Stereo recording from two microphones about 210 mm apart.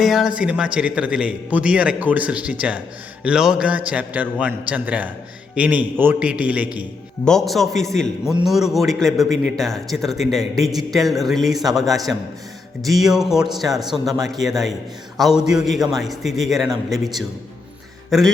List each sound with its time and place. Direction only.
0.0 s a man's voice: centre (ahead or behind)